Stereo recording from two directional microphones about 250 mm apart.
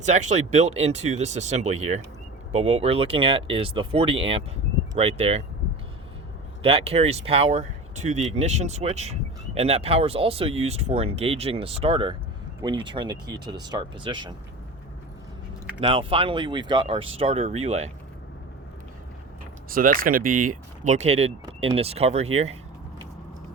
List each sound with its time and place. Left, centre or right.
0.0 s speech: right
6.6 s speech: right
15.8 s speech: right
19.7 s speech: right